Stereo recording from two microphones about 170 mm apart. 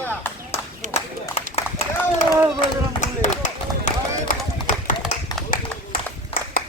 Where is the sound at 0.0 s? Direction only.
10° left (ahead or behind).